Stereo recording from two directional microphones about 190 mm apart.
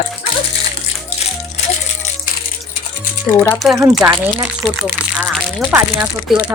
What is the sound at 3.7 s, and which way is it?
Speech, 15° right (ahead or behind).